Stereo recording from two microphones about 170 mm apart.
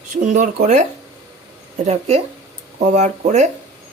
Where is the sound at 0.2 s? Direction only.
45° right (ahead or behind).